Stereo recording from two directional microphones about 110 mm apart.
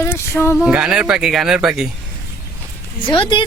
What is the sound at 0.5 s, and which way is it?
Speech, 5° right (ahead or behind).